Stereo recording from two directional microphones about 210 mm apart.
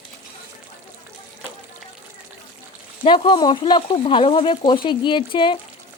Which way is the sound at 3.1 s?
25° left (ahead or behind).